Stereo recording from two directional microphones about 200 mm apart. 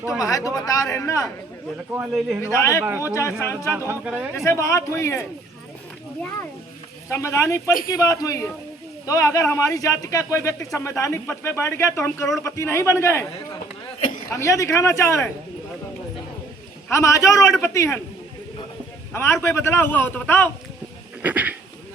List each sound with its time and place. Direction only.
0.2 s speech: 15° left (ahead or behind)
2.0 s speech: 5° right (ahead or behind)
2.4 s speech: 15° left (ahead or behind)
3.8 s speech: 10° right (ahead or behind)
4.4 s speech: 15° left (ahead or behind)
7.1 s speech: 15° left (ahead or behind)
14.3 s speech: 15° left (ahead or behind)
16.9 s speech: 15° left (ahead or behind)
19.1 s speech: 10° left (ahead or behind)
21.2 s a sound: 5° right (ahead or behind)